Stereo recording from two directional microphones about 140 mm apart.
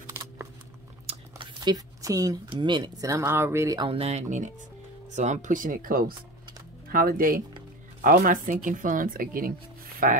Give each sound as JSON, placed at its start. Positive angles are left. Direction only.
{"t": 1.0, "sound": "typing", "side_deg": -35}
{"t": 2.5, "sound": "speech", "side_deg": -35}
{"t": 3.8, "sound": "speech", "side_deg": -45}
{"t": 10.0, "sound": "speech", "side_deg": -70}